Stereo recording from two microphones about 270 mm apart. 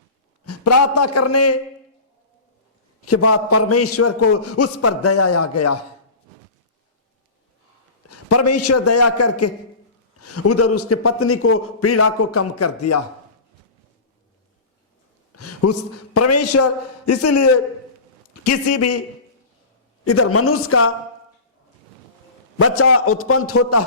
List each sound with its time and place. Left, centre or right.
0.4 s a man's voice: left
3.1 s a man's voice: left
8.0 s a man's voice: left
15.3 s a man's voice: left
20.1 s a man's voice: left
22.5 s a man's voice: left